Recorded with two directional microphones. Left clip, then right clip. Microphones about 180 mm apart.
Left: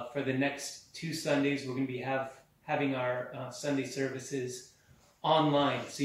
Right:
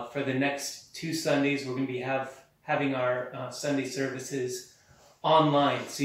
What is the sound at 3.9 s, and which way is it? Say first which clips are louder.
Speech: right 3 dB; 15° left (ahead or behind).